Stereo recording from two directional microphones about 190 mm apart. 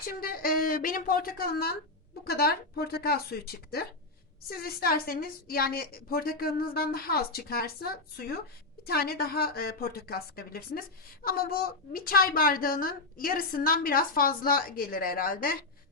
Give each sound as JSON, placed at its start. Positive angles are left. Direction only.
{"t": 0.1, "sound": "speech", "side_deg": 50}